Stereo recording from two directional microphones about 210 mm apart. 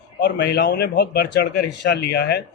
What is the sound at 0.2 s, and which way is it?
Speech, 55° left (ahead or behind).